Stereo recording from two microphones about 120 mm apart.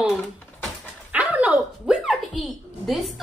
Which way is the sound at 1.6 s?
5° right (ahead or behind).